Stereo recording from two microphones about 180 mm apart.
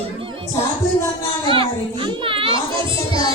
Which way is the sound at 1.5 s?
30° right (ahead or behind).